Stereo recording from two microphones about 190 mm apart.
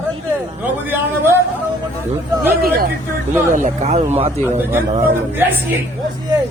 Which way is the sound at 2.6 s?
50° right (ahead or behind).